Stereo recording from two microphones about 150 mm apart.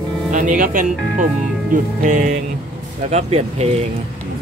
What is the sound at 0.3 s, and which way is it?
Music, 60° right (ahead or behind).